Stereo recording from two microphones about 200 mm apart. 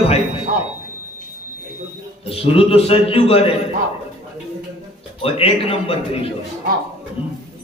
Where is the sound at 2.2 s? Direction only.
30° left (ahead or behind).